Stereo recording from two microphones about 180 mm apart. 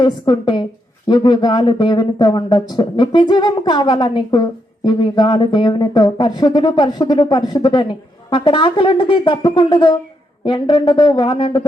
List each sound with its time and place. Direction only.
0.0 s speech: 25° left (ahead or behind)